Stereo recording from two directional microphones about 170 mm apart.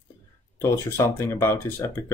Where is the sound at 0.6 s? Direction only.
15° left (ahead or behind).